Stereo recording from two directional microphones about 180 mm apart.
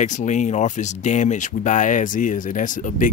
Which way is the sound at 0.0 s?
40° left (ahead or behind).